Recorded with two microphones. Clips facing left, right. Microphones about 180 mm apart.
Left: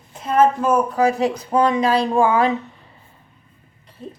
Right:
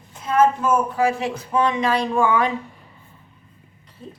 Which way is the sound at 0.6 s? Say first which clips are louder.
Left 2 dB; 35° left (ahead or behind).